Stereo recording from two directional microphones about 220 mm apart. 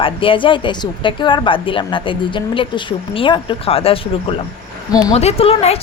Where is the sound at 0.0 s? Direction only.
25° left (ahead or behind).